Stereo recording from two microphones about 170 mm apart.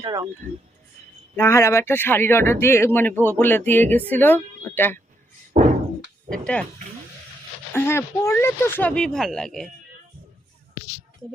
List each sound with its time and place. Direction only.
0.0 s speech: 20° right (ahead or behind)
1.4 s speech: 15° left (ahead or behind)
6.3 s speech: 5° left (ahead or behind)
7.7 s speech: 15° left (ahead or behind)